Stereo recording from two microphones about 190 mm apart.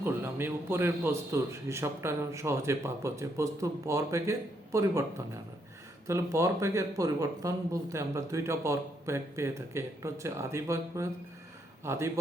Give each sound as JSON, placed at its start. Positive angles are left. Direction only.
{"t": 0.0, "sound": "speech", "side_deg": -10}
{"t": 6.1, "sound": "speech", "side_deg": -15}